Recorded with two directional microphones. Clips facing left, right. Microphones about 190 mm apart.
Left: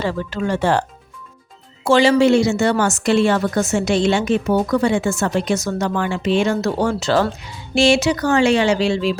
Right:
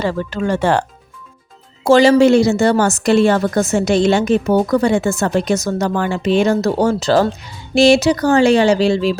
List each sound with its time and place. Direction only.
0.0 s speech: 45° right (ahead or behind)
1.8 s a woman's voice: 40° right (ahead or behind)